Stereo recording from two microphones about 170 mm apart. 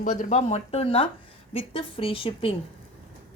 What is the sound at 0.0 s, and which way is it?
Speech, 50° left (ahead or behind).